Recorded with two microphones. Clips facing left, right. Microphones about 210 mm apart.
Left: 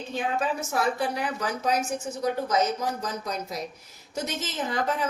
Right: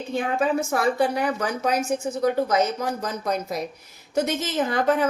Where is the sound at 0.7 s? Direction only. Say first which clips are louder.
Right 5 dB; 55° right (ahead or behind).